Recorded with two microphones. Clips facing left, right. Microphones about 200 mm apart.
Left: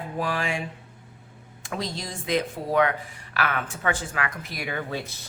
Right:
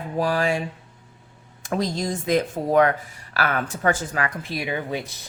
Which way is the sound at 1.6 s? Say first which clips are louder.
Right 7 dB; 45° right (ahead or behind).